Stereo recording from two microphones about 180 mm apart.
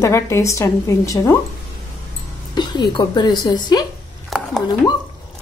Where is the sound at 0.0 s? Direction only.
15° left (ahead or behind).